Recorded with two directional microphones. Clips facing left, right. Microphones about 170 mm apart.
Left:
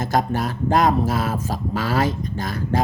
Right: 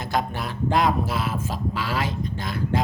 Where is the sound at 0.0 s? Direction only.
45° left (ahead or behind).